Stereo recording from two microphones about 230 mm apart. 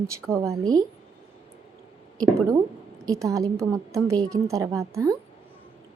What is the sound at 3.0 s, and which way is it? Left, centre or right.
A woman's voice, centre.